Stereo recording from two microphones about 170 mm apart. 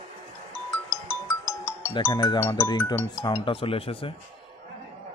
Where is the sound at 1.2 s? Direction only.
15° left (ahead or behind).